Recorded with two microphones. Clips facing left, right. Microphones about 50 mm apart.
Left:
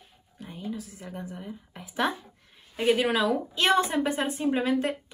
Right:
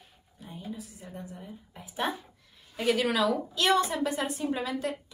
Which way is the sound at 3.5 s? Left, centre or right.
Left.